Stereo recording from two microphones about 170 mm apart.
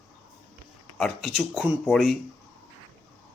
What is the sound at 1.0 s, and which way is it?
Speech, centre (ahead or behind).